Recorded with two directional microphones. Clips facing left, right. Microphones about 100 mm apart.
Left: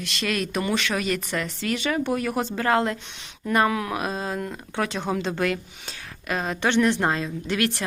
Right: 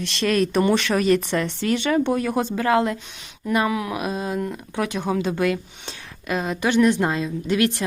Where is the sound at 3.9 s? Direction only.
30° left (ahead or behind).